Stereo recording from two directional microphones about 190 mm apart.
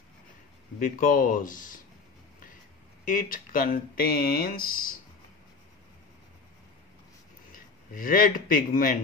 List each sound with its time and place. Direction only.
0.7 s speech: 45° left (ahead or behind)
3.1 s speech: 45° left (ahead or behind)
7.5 s a man's voice: 45° left (ahead or behind)